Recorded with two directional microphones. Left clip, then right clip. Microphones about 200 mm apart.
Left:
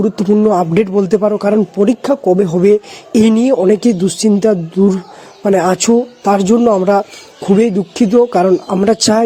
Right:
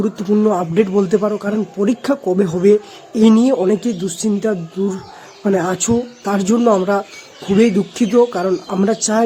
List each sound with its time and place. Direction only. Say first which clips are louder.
0.0 s speech: left 4 dB; 20° left (ahead or behind)
2.6 s a man's voice: left 2 dB; 35° left (ahead or behind)
8.8 s a man's voice: left 4 dB; 40° left (ahead or behind)